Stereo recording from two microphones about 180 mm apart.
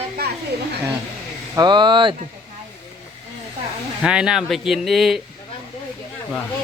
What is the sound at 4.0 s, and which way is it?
Speech, 5° right (ahead or behind).